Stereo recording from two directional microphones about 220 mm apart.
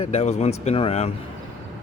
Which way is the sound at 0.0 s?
30° left (ahead or behind).